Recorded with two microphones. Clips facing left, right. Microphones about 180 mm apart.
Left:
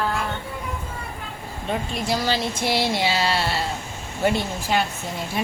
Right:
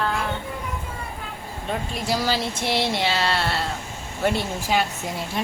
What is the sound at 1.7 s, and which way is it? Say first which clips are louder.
Speech: left 1 dB; 5° right (ahead or behind).